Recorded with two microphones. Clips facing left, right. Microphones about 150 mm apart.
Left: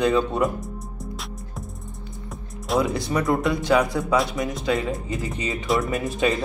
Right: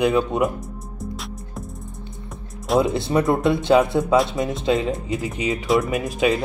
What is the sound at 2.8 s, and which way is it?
Speech, 25° right (ahead or behind).